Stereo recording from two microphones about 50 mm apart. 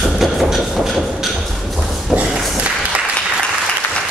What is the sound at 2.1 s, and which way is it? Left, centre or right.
Applause, right.